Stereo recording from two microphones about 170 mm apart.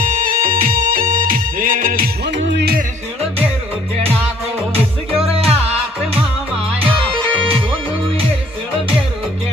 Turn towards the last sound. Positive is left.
turn(degrees=-30)  # may be behind; listen again after turning